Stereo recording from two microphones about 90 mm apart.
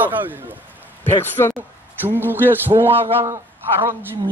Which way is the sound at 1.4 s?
35° left (ahead or behind).